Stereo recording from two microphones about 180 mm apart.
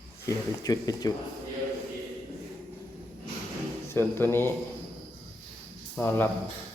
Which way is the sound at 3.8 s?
15° left (ahead or behind).